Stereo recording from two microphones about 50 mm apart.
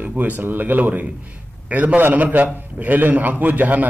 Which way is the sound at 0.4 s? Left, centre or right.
Right.